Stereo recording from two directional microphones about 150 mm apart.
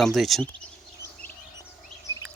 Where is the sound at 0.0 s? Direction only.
Centre (ahead or behind).